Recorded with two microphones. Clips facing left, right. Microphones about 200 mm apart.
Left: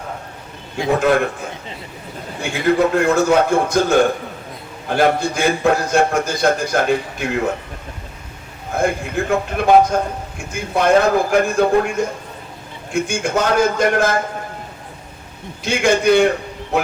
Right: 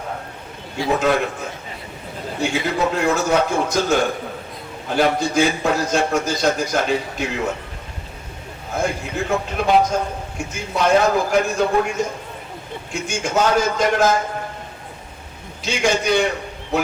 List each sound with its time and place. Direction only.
2.4 s a man's voice: 55° left (ahead or behind)
8.7 s a man's voice: 55° left (ahead or behind)
15.6 s a man's voice: 55° left (ahead or behind)